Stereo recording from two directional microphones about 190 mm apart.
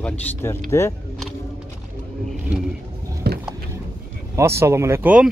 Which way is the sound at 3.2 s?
55° right (ahead or behind).